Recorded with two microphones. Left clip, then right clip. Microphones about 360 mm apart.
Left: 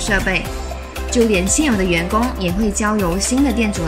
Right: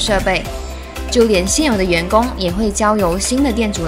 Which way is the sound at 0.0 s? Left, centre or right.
Centre.